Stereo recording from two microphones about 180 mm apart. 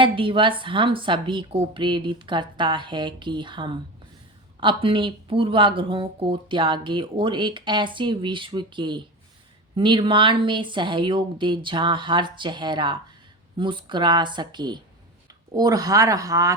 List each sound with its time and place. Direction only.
0.0 s speech: 30° right (ahead or behind)